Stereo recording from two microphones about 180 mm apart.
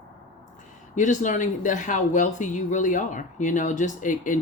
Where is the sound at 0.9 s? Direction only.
45° left (ahead or behind).